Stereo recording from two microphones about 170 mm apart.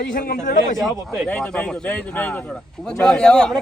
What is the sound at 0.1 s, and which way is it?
Speech, 55° left (ahead or behind).